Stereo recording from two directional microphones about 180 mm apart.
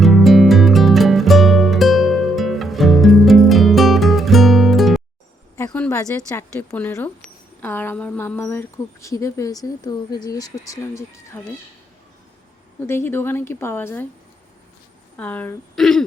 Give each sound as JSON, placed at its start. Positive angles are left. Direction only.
{"t": 0.0, "sound": "music", "side_deg": 0}
{"t": 5.5, "sound": "a woman's voice", "side_deg": 10}
{"t": 12.8, "sound": "a woman's voice", "side_deg": 15}
{"t": 15.1, "sound": "a woman's voice", "side_deg": 10}